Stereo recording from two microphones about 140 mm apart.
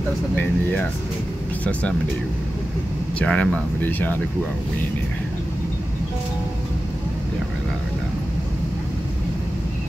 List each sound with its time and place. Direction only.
1.6 s speech: 10° left (ahead or behind)
3.2 s speech: 10° left (ahead or behind)